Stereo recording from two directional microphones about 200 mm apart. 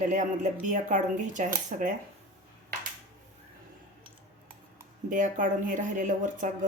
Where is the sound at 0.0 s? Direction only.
40° right (ahead or behind).